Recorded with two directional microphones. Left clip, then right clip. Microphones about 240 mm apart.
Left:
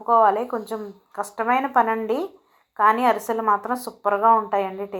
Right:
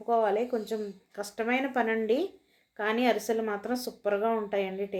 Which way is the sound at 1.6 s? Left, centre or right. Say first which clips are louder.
Left 8 dB; left.